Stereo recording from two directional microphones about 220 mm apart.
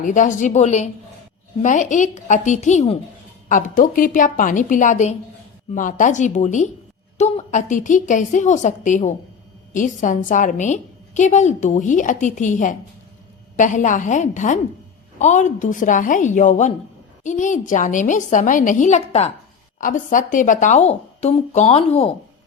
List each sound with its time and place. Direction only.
0.0 s a woman's voice: 35° left (ahead or behind)